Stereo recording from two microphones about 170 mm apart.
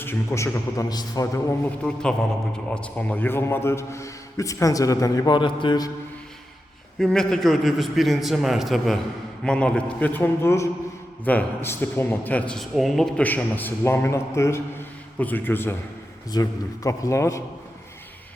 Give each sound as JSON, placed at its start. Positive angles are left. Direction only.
{"t": 0.0, "sound": "a man's voice", "side_deg": 15}
{"t": 1.8, "sound": "a man's voice", "side_deg": 5}
{"t": 7.0, "sound": "a man's voice", "side_deg": 5}